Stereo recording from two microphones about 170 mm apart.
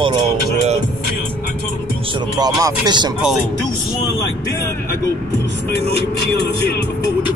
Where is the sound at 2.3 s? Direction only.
20° right (ahead or behind).